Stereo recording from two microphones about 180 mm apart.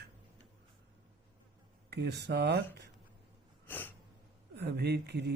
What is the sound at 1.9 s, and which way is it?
Speech, 65° right (ahead or behind).